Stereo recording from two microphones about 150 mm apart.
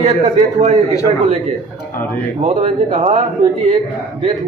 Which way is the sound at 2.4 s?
45° right (ahead or behind).